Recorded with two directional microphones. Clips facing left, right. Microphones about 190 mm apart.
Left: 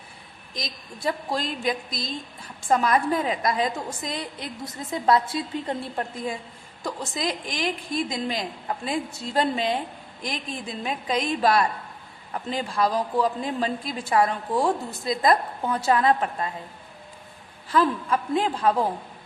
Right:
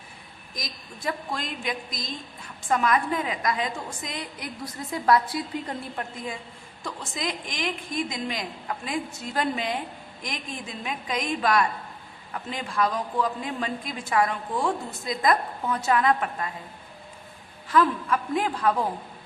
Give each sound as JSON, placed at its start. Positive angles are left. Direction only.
{"t": 0.5, "sound": "a woman's voice", "side_deg": 30}
{"t": 10.8, "sound": "a woman's voice", "side_deg": 30}
{"t": 17.7, "sound": "a man's voice", "side_deg": 30}